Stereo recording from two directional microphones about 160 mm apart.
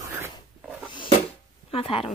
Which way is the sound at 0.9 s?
35° left (ahead or behind).